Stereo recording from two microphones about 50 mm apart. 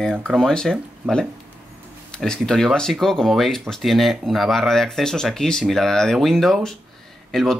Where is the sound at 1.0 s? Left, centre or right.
Right.